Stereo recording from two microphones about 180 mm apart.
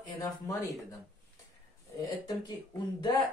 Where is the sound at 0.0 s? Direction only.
20° left (ahead or behind).